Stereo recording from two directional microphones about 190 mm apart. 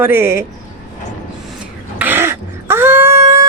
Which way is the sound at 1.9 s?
10° right (ahead or behind).